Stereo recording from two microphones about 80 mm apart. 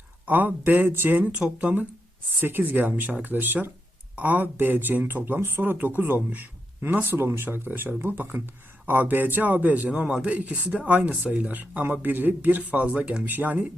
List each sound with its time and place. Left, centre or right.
0.3 s speech: right
9.9 s speech: centre